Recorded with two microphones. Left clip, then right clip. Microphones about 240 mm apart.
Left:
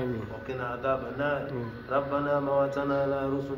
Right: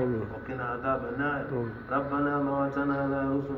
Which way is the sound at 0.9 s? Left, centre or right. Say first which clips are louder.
Left 2 dB; left.